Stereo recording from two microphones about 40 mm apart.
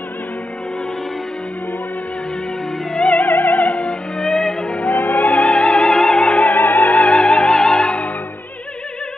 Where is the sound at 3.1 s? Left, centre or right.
Left.